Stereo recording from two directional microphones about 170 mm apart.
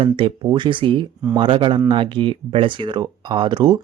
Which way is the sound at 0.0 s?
30° right (ahead or behind).